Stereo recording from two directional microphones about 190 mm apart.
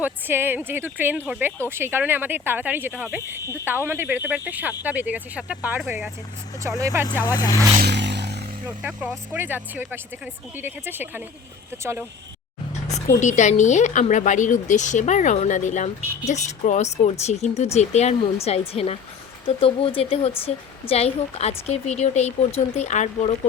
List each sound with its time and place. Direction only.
0.0 s speech: 10° right (ahead or behind)
7.1 s speech: 10° left (ahead or behind)
7.8 s a sound: 65° right (ahead or behind)
8.6 s speech: 10° right (ahead or behind)
12.9 s a woman's voice: 40° left (ahead or behind)